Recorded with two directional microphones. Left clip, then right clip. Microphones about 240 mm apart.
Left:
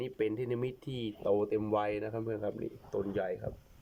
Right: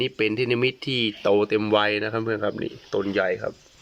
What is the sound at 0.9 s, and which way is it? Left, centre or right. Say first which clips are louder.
Speech: right 10 dB; right.